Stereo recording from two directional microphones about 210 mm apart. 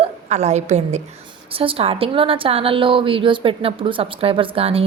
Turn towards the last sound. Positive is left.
turn(degrees=-25)  # may be behind; listen again after turning